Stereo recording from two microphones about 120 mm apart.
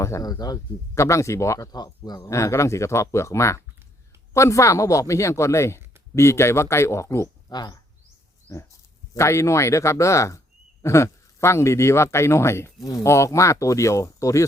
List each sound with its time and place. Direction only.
0.0 s speech: 30° left (ahead or behind)
9.1 s speech: 25° left (ahead or behind)